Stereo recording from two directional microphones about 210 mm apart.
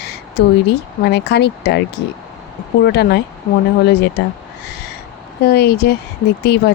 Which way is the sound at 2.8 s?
50° left (ahead or behind).